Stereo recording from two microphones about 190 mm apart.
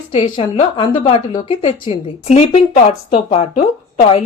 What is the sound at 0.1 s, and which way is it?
A woman's voice, 40° left (ahead or behind).